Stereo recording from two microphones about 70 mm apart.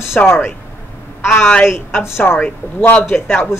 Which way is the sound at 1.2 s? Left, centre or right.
Left.